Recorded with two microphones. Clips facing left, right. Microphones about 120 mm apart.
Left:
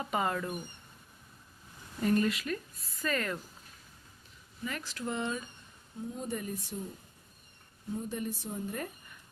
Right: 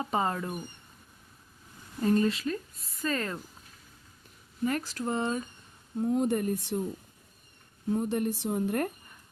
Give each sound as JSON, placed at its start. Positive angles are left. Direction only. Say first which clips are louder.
{"t": 0.0, "sound": "speech", "louder": "right 2 dB", "side_deg": -30}
{"t": 2.0, "sound": "speech", "louder": "right 3 dB", "side_deg": -30}
{"t": 4.6, "sound": "speech", "louder": "right 8 dB", "side_deg": -45}
{"t": 6.0, "sound": "speech", "louder": "right 11 dB", "side_deg": -65}
{"t": 7.9, "sound": "a woman's voice", "louder": "right 8 dB", "side_deg": -65}